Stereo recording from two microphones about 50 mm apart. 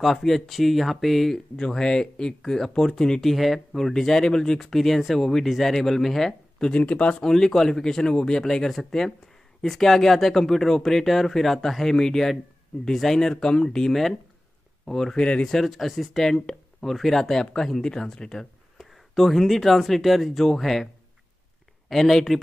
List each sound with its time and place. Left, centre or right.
0.0 s speech: centre
1.6 s speech: centre
3.2 s speech: centre
6.7 s speech: left
7.2 s speech: centre
15.1 s speech: left
15.4 s speech: centre
18.8 s speech: centre